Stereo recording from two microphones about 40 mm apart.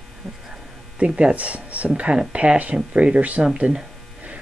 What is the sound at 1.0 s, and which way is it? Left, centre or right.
Speech, right.